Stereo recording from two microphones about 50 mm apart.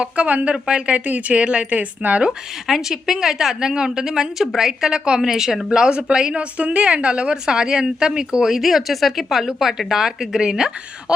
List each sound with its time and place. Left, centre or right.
0.0 s a woman's voice: right
0.9 s a woman's voice: right
2.6 s a woman's voice: centre